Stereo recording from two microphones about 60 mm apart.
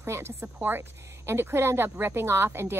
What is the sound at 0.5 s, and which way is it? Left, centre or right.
Speech, right.